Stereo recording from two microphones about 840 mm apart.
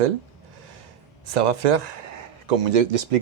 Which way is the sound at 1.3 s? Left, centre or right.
Right.